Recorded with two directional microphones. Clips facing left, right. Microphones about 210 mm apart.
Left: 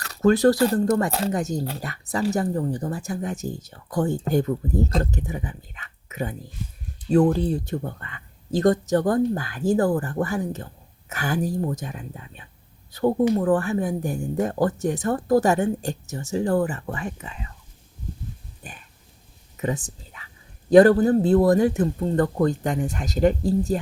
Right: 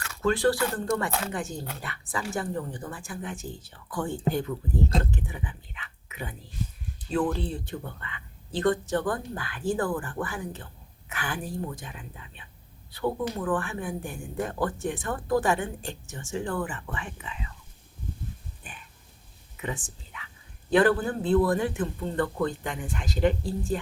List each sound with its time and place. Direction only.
0.0 s speech: 40° left (ahead or behind)
18.6 s a sound: 40° left (ahead or behind)
19.5 s speech: 40° left (ahead or behind)